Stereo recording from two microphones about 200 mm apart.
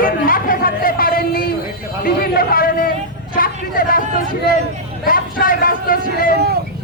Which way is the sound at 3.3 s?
45° left (ahead or behind).